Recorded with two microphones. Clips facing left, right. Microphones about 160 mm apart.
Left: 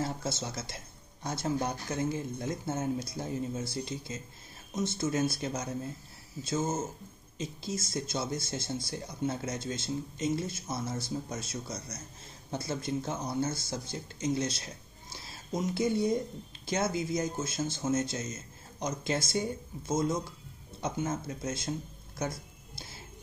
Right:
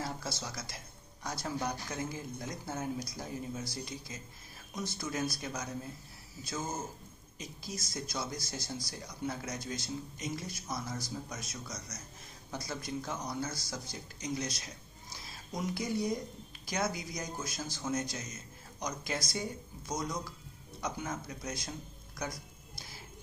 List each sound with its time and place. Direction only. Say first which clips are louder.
0.0 s speech: left 5 dB; 25° left (ahead or behind)